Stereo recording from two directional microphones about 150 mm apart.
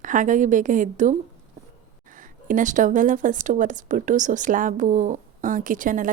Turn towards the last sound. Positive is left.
turn(degrees=-60)  # may be behind; listen again after turning